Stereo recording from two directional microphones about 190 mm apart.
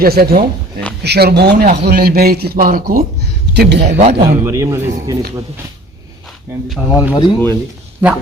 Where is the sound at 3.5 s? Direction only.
60° right (ahead or behind).